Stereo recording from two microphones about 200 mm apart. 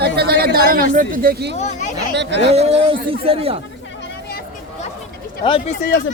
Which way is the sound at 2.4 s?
30° right (ahead or behind).